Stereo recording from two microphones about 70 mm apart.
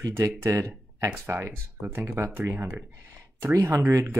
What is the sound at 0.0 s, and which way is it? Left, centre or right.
Speech, right.